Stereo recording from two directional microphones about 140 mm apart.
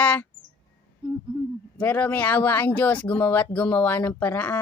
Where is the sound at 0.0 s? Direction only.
10° left (ahead or behind).